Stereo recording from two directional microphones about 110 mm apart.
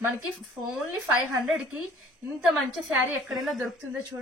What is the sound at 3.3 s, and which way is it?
Speech, centre (ahead or behind).